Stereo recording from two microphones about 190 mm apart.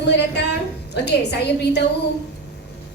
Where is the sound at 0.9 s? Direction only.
60° left (ahead or behind).